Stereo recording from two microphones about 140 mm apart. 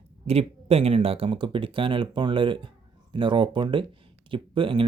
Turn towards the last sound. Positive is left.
turn(degrees=-40)  # may be behind; listen again after turning